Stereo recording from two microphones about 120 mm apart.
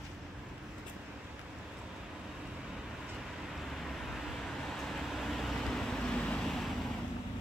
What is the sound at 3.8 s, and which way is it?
Vehicle, centre (ahead or behind).